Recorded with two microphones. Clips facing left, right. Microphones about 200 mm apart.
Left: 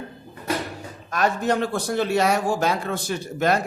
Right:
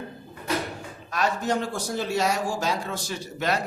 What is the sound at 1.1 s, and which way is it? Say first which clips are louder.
A man's voice: left 3 dB; 55° left (ahead or behind).